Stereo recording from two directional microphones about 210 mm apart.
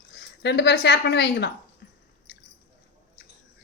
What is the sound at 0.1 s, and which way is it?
Speech, 55° left (ahead or behind).